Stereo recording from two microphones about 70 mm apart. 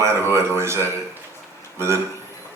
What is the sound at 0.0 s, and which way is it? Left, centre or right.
Speech, right.